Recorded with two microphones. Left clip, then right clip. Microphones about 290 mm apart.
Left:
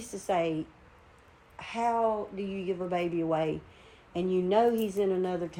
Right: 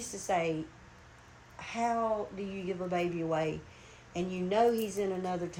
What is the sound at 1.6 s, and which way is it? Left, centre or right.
Speech, left.